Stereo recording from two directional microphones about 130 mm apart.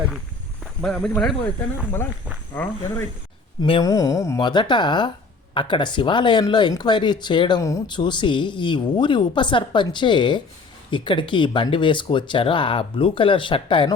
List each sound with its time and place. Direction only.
0.8 s speech: 5° left (ahead or behind)
3.6 s speech: 35° left (ahead or behind)
4.4 s speech: 35° left (ahead or behind)